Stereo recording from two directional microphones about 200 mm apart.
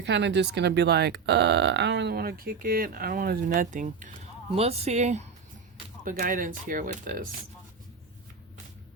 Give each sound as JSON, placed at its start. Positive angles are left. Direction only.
{"t": 0.0, "sound": "speech", "side_deg": -60}